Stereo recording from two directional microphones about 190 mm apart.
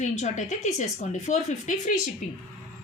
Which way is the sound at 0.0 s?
40° left (ahead or behind).